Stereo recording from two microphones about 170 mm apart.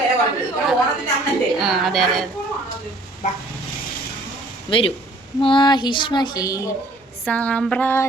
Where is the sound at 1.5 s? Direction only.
Centre (ahead or behind).